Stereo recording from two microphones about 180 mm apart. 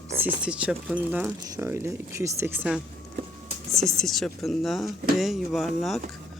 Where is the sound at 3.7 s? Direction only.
Centre (ahead or behind).